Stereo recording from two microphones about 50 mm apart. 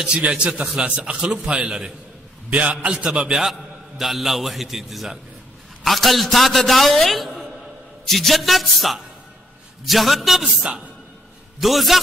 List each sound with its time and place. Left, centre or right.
0.4 s a man's voice: centre
2.5 s a man's voice: right
3.1 s a woman's voice: centre
10.4 s a woman's voice: centre
11.6 s a man's voice: centre